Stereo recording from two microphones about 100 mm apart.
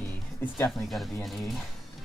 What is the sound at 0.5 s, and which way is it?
Speech, centre (ahead or behind).